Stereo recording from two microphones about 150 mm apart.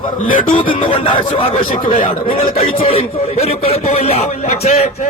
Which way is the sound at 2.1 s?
40° left (ahead or behind).